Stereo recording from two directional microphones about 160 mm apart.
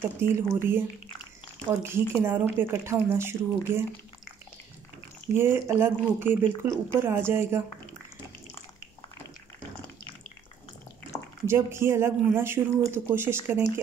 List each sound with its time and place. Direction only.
0.0 s speech: 15° right (ahead or behind)
1.7 s speech: 15° right (ahead or behind)
5.3 s speech: 15° right (ahead or behind)
11.4 s speech: 15° right (ahead or behind)